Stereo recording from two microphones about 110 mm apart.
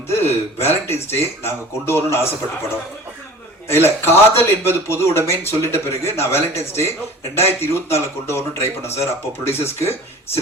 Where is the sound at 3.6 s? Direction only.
20° left (ahead or behind).